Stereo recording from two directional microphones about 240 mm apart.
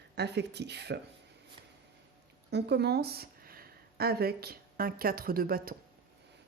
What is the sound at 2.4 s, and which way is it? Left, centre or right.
Speech, right.